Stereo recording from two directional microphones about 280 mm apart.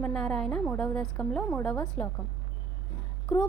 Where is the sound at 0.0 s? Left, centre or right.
Centre.